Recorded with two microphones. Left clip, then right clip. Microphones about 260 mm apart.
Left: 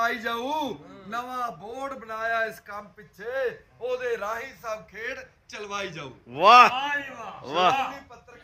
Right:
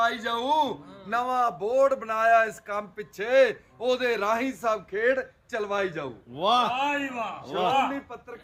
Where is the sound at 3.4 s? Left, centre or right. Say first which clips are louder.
Right 5 dB; right; by 6.1 s centre.